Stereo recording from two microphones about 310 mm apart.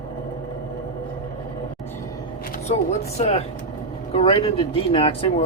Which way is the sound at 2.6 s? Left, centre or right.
Left.